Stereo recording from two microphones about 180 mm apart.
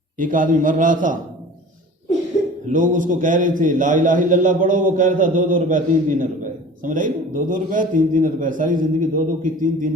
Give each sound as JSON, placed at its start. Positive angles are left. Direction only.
{"t": 0.2, "sound": "a man's voice", "side_deg": -45}
{"t": 2.7, "sound": "a man's voice", "side_deg": -45}